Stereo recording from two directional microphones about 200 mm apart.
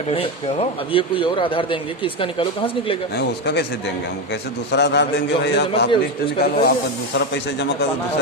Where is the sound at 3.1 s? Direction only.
55° left (ahead or behind).